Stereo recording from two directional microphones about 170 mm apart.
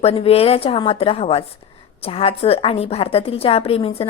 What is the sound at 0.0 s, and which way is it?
A woman's voice, 35° left (ahead or behind).